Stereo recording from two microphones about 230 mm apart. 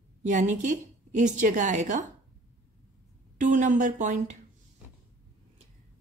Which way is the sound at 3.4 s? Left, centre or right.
Right.